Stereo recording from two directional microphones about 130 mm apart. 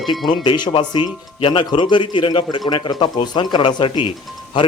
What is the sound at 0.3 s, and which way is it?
Speech, 35° left (ahead or behind).